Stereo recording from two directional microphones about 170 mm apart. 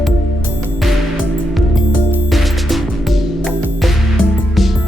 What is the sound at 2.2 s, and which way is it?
Music, centre (ahead or behind).